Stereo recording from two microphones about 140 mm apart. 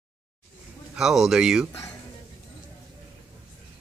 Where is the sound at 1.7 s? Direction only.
20° left (ahead or behind).